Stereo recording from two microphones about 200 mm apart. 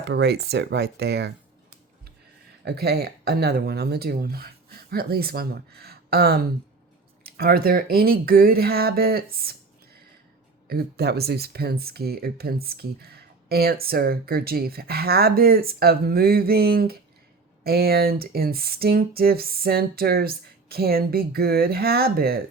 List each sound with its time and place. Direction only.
0.0 s speech: 55° right (ahead or behind)
2.6 s speech: 55° right (ahead or behind)
9.3 s a sound: 50° right (ahead or behind)
10.7 s speech: 50° right (ahead or behind)